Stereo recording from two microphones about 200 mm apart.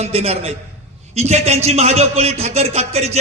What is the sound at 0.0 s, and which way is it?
A man's voice, 30° right (ahead or behind).